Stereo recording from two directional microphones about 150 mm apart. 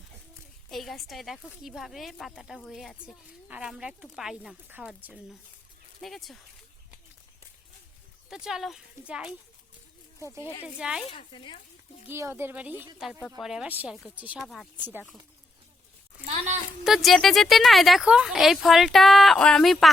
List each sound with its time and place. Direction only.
0.7 s speech: centre (ahead or behind)
8.3 s speech: 5° right (ahead or behind)
10.8 s speech: 5° right (ahead or behind)
11.1 s speech: 35° left (ahead or behind)
12.0 s speech: 15° right (ahead or behind)
14.4 s speech: centre (ahead or behind)
14.8 s speech: 15° right (ahead or behind)
16.5 s speech: 5° right (ahead or behind)